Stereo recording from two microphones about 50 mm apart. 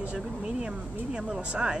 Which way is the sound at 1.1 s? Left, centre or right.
Centre.